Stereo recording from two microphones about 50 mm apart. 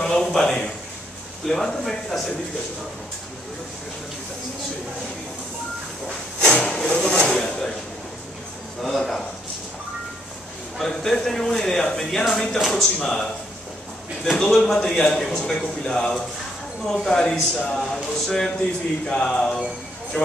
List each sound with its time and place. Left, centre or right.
0.0 s a man's voice: centre
6.0 s speech: centre
8.8 s speech: centre
10.8 s speech: centre
12.5 s speech: centre
12.8 s speech: centre
14.6 s speech: centre